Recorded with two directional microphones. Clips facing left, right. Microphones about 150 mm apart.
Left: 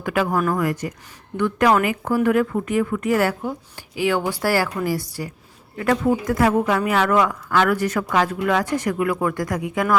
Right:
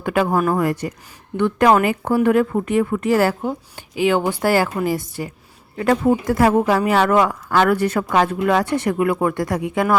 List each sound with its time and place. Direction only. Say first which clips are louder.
0.0 s a woman's voice: right 3 dB; 30° right (ahead or behind)